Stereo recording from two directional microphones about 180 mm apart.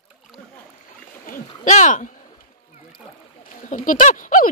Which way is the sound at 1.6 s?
45° left (ahead or behind).